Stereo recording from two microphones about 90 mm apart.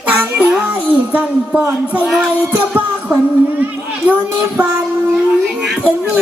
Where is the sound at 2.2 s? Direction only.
15° right (ahead or behind).